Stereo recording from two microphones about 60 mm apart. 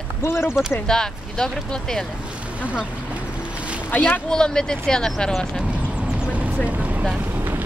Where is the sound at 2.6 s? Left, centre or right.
Left.